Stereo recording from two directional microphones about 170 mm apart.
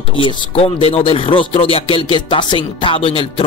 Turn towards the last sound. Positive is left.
turn(degrees=30)  # may be behind; listen again after turning